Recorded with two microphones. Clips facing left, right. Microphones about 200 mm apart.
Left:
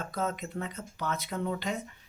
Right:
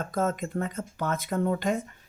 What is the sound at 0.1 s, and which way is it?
Speech, 50° right (ahead or behind).